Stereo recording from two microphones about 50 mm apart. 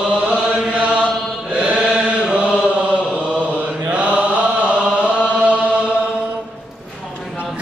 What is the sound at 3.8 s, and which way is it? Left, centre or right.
Chant, right.